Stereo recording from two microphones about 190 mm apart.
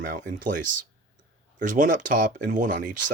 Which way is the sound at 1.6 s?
45° right (ahead or behind).